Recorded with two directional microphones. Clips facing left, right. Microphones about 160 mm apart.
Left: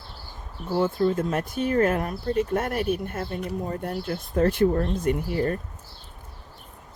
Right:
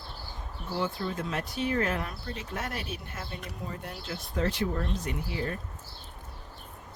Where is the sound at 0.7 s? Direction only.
50° left (ahead or behind).